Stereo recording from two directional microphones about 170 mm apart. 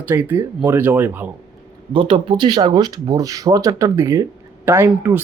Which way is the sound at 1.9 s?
30° right (ahead or behind).